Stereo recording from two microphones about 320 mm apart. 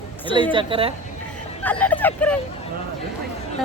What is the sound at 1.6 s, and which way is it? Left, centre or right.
Speech, centre.